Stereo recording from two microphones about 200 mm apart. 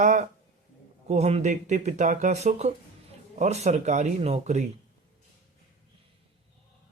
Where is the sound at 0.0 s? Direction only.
40° right (ahead or behind).